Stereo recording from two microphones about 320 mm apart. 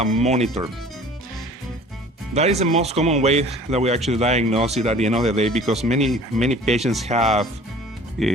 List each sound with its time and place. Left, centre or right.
0.2 s speech: right
2.3 s speech: centre
8.2 s speech: centre